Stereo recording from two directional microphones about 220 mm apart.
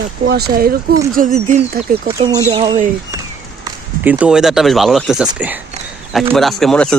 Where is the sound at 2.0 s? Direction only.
20° right (ahead or behind).